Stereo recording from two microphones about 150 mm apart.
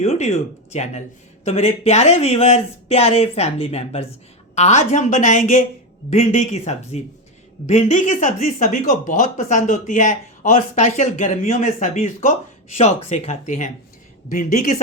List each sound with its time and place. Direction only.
0.0 s speech: 45° left (ahead or behind); by 5.6 s 60° left (ahead or behind)
6.1 s speech: 50° left (ahead or behind)